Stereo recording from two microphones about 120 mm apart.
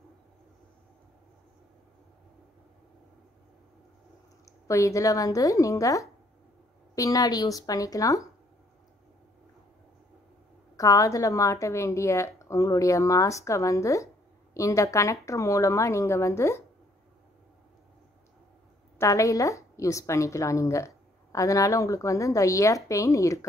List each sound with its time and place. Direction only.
4.5 s a woman's voice: 25° left (ahead or behind)
10.8 s a woman's voice: 25° left (ahead or behind)
18.9 s a woman's voice: 25° left (ahead or behind)